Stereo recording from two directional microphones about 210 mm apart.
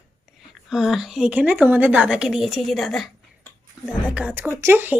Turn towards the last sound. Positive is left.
turn(degrees=-10)  # may be behind; listen again after turning